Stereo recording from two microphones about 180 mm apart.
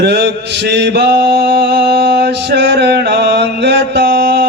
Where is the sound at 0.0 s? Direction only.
65° right (ahead or behind).